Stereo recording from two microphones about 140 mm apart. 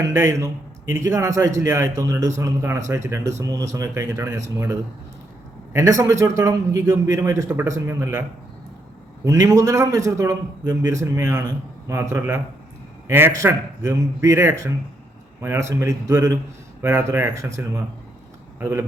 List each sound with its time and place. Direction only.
0.1 s speech: 20° right (ahead or behind)
9.2 s speech: 20° right (ahead or behind)
18.6 s speech: 15° right (ahead or behind)